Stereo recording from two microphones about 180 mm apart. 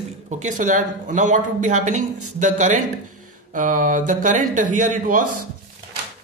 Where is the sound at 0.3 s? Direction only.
40° right (ahead or behind).